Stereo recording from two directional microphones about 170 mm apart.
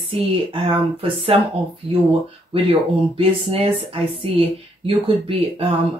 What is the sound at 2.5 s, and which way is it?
Speech, 35° right (ahead or behind).